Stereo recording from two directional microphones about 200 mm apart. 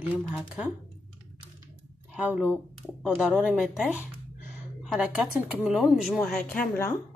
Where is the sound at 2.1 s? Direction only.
5° right (ahead or behind).